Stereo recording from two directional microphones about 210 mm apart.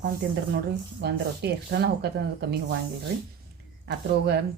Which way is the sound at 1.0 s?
50° right (ahead or behind).